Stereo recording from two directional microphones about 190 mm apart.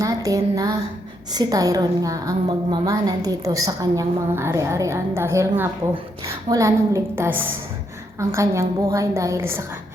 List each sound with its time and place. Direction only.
0.0 s a woman's voice: 20° right (ahead or behind)